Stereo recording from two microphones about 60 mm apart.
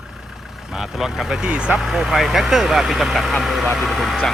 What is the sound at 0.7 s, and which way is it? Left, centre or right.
Speech, centre.